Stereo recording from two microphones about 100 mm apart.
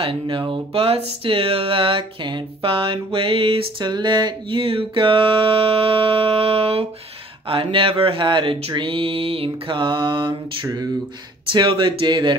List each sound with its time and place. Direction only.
0.0 s music: 60° right (ahead or behind)
3.9 s speech: 50° right (ahead or behind)
4.6 s music: 65° right (ahead or behind)
7.4 s music: 60° right (ahead or behind); by 10.9 s 45° right (ahead or behind)
11.5 s speech: 55° right (ahead or behind)